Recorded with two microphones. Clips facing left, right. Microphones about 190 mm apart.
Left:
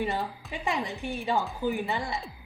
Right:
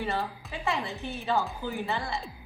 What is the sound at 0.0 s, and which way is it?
A woman's voice, 15° left (ahead or behind).